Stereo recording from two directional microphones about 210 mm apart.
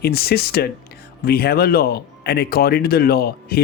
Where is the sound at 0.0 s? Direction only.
50° left (ahead or behind).